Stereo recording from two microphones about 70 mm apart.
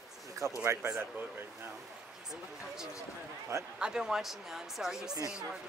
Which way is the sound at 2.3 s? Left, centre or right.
Centre.